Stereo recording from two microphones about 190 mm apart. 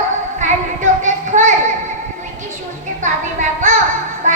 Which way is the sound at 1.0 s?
40° right (ahead or behind).